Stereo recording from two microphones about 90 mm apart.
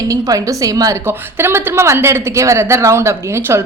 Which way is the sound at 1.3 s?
25° right (ahead or behind).